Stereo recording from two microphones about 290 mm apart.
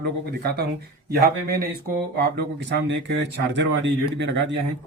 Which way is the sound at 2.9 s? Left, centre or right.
Right.